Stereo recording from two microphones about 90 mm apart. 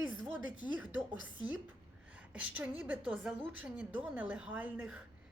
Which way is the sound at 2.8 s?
15° right (ahead or behind).